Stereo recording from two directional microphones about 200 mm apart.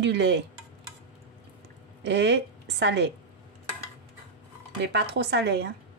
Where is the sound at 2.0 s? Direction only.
60° right (ahead or behind).